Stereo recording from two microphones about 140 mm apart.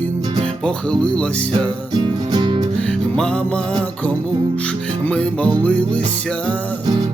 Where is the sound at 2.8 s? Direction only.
10° left (ahead or behind).